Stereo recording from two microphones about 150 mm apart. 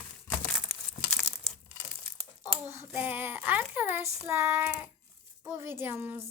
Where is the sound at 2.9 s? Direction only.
10° right (ahead or behind).